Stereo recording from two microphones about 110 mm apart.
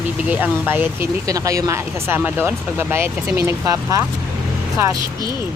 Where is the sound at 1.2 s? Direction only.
30° right (ahead or behind).